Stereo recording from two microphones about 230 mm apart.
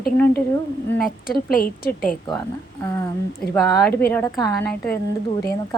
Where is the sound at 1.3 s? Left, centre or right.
Left.